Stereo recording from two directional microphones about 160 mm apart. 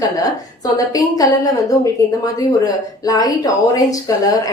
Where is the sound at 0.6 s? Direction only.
25° left (ahead or behind).